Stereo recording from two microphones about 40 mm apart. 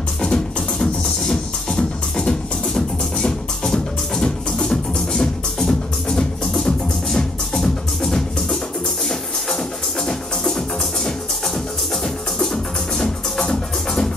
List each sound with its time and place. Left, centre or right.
0.2 s music: centre